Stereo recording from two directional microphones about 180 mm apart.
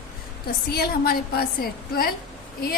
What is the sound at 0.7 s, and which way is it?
A woman's voice, 60° left (ahead or behind).